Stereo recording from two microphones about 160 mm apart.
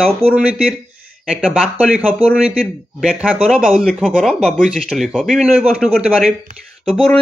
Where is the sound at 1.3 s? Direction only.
5° right (ahead or behind).